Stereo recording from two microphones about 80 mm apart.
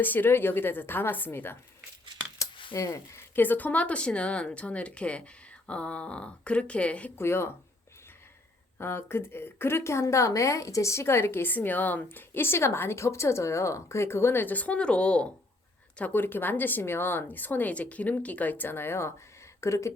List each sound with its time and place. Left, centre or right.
0.0 s speech: left
2.7 s speech: left; by 7.1 s centre
7.2 s a woman's voice: left
8.8 s a woman's voice: left